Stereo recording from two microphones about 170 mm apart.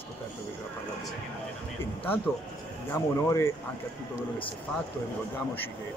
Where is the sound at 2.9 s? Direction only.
15° left (ahead or behind).